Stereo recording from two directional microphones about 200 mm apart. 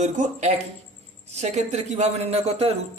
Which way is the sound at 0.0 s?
35° right (ahead or behind).